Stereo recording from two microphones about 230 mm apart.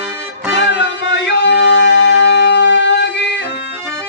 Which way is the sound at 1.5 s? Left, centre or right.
Left.